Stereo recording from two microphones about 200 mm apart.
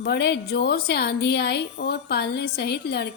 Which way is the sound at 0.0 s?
55° left (ahead or behind).